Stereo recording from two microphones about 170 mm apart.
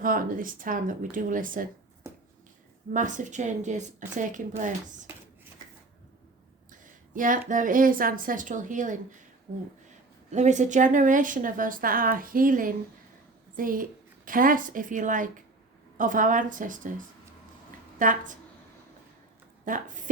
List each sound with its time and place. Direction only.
0.0 s a woman's voice: 55° right (ahead or behind)
2.9 s a woman's voice: 50° right (ahead or behind)
6.7 s a woman's voice: 50° right (ahead or behind)
10.3 s a woman's voice: 45° right (ahead or behind)
18.0 s a woman's voice: 50° right (ahead or behind)
19.7 s a woman's voice: 50° right (ahead or behind)